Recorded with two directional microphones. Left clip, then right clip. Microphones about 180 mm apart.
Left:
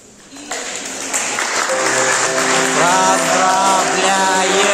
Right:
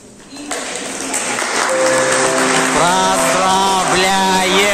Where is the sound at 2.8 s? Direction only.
15° right (ahead or behind).